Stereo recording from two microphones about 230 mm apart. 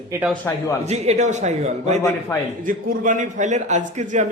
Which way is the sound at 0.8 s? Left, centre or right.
Right.